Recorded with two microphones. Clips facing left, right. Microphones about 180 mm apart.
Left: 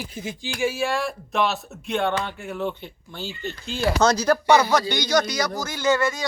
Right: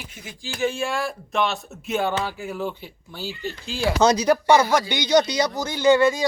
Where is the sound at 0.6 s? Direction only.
5° left (ahead or behind).